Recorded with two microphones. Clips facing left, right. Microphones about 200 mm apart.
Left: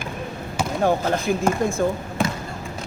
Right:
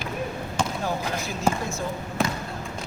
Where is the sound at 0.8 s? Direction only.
55° left (ahead or behind).